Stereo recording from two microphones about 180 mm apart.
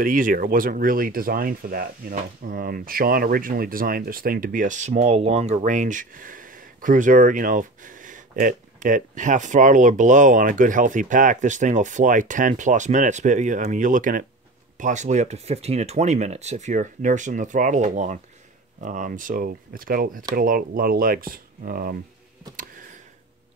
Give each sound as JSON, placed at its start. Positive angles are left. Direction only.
{"t": 0.0, "sound": "speech", "side_deg": -50}